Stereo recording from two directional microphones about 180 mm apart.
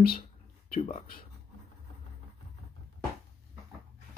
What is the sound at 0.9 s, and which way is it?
Speech, 55° left (ahead or behind).